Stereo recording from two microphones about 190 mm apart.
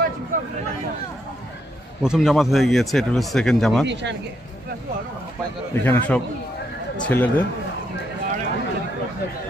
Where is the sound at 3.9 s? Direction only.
70° right (ahead or behind).